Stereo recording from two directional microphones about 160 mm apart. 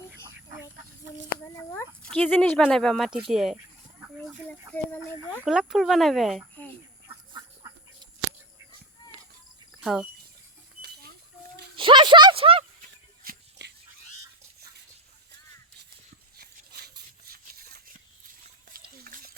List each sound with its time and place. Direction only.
1.5 s a sound: 15° left (ahead or behind)
2.0 s speech: 10° left (ahead or behind)
4.7 s speech: 10° left (ahead or behind)
5.5 s speech: 5° right (ahead or behind)
9.8 s speech: 5° right (ahead or behind)
11.8 s speech: 30° right (ahead or behind)
12.8 s music: 75° right (ahead or behind)
16.4 s a sound: 75° right (ahead or behind)
19.0 s a sound: 70° right (ahead or behind)